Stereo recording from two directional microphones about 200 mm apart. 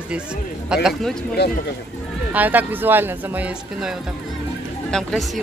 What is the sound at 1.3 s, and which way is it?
Speech, 55° left (ahead or behind).